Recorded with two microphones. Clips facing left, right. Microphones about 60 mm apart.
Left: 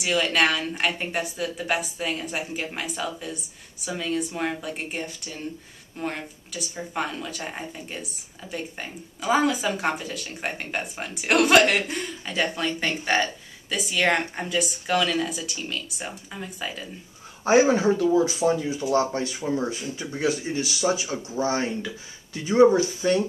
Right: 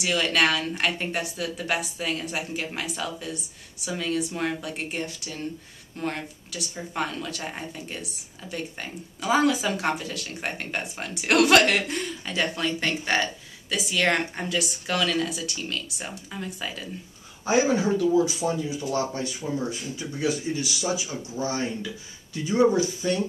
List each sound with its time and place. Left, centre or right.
0.0 s speech: centre
17.5 s speech: left
19.6 s speech: centre
20.0 s speech: left